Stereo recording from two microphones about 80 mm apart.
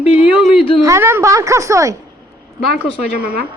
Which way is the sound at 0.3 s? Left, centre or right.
Centre.